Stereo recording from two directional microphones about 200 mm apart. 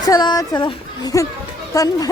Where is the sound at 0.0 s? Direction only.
20° left (ahead or behind).